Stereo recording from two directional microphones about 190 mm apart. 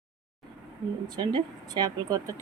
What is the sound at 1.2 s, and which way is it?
Speech, 20° right (ahead or behind).